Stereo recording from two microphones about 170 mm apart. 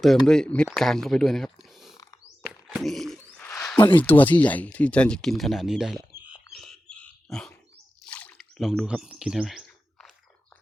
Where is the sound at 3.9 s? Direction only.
10° left (ahead or behind).